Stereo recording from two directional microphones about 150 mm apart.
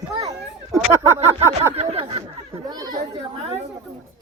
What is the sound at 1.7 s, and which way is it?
Speech, 45° right (ahead or behind).